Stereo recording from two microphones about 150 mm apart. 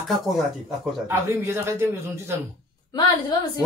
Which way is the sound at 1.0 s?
15° right (ahead or behind).